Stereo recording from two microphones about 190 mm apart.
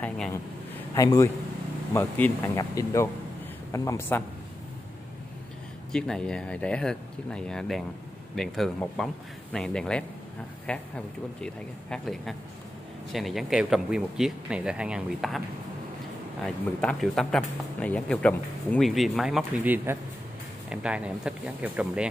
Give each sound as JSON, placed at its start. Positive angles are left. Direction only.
{"t": 0.0, "sound": "speech", "side_deg": 10}
{"t": 5.9, "sound": "speech", "side_deg": 5}
{"t": 16.4, "sound": "speech", "side_deg": 0}